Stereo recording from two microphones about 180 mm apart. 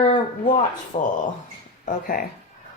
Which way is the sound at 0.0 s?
45° left (ahead or behind).